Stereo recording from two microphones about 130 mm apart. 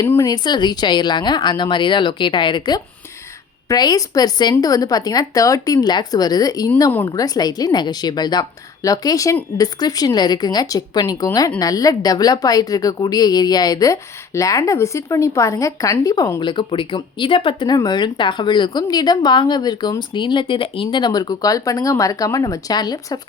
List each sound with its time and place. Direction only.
0.0 s a woman's voice: 25° left (ahead or behind)